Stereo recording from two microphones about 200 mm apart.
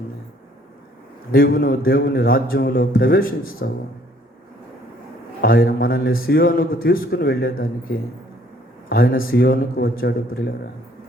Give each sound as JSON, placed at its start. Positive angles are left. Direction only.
{"t": 1.3, "sound": "a man's voice", "side_deg": 50}
{"t": 5.4, "sound": "a man's voice", "side_deg": 50}